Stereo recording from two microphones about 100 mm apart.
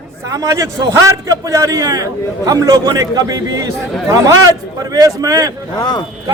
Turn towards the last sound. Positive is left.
turn(degrees=45)  # may be behind; listen again after turning